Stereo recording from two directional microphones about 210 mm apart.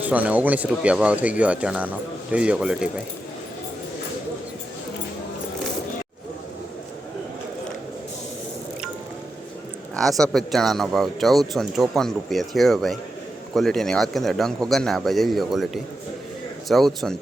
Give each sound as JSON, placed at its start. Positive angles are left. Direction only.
{"t": 0.0, "sound": "speech", "side_deg": -5}
{"t": 9.9, "sound": "speech", "side_deg": 0}